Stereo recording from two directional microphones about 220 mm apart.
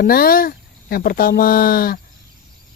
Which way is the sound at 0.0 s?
40° left (ahead or behind).